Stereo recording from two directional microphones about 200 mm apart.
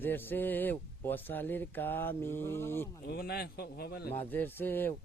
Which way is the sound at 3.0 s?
50° left (ahead or behind).